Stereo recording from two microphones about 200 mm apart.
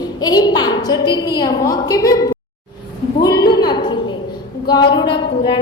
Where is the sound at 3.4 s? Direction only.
20° left (ahead or behind).